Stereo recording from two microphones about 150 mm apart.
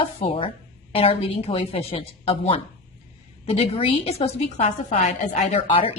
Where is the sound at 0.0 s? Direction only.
40° left (ahead or behind); by 5.5 s 55° left (ahead or behind).